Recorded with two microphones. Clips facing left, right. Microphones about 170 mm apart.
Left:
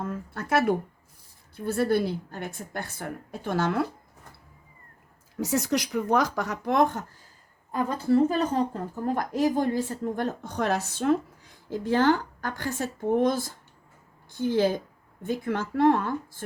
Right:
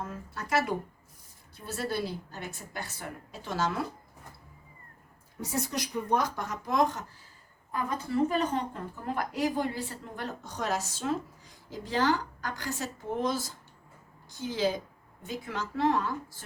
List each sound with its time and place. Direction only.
0.0 s a sound: 55° left (ahead or behind)
1.5 s a woman's voice: 55° left (ahead or behind)
5.4 s speech: 85° left; by 7.0 s 55° left (ahead or behind)
7.7 s a woman's voice: 35° left (ahead or behind); by 16.4 s 55° left (ahead or behind)